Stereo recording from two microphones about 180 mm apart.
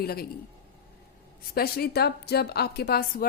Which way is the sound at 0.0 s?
60° left (ahead or behind).